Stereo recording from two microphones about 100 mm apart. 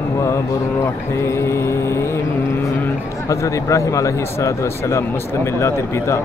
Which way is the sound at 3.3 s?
30° left (ahead or behind).